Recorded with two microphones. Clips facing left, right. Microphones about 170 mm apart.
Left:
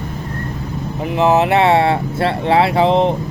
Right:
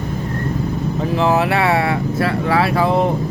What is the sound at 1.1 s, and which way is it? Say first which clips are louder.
Speech: left 3 dB; 20° left (ahead or behind).